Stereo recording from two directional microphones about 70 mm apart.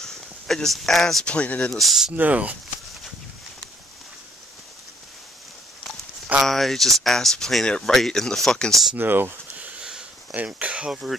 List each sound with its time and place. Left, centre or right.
0.0 s a sound: centre
1.2 s speech: centre
1.7 s speech: centre
2.1 s speech: right
6.4 s speech: centre
8.9 s speech: right
9.6 s sniff: centre
10.3 s speech: right
10.9 s speech: centre